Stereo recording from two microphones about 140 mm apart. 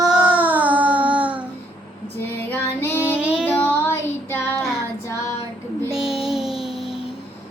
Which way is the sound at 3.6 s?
15° left (ahead or behind).